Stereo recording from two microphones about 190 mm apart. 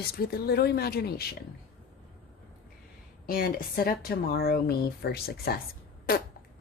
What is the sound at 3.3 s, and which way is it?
Speech, 50° left (ahead or behind).